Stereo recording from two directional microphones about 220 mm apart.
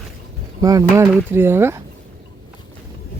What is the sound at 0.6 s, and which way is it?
Speech, 15° right (ahead or behind).